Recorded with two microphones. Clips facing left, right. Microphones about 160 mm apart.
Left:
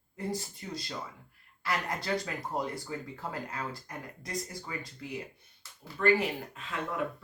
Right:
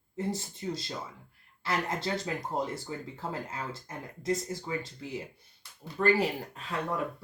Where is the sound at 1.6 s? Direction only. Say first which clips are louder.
Right 2 dB; 25° right (ahead or behind).